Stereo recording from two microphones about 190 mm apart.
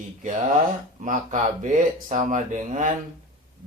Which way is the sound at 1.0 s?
40° right (ahead or behind).